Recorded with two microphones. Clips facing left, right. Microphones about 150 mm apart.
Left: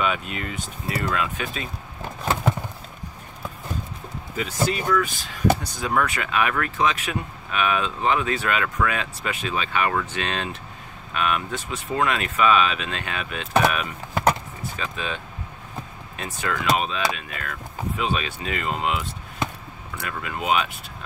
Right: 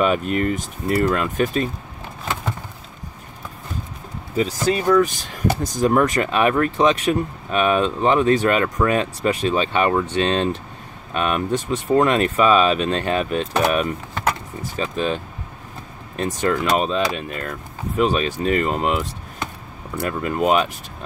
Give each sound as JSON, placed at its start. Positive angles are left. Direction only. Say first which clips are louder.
{"t": 0.0, "sound": "speech", "louder": "right 8 dB", "side_deg": -45}
{"t": 4.4, "sound": "speech", "louder": "right 5 dB", "side_deg": -35}